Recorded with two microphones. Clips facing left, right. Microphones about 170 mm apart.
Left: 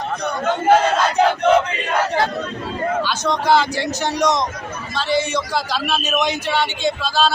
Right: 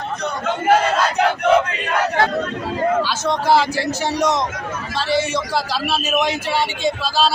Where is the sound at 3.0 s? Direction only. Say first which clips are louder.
Right 1 dB; 5° right (ahead or behind).